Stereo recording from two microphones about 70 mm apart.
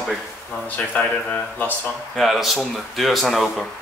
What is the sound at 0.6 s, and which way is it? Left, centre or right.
Speech, left.